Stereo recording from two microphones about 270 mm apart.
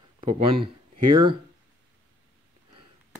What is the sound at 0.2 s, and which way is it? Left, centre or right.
Speech, centre.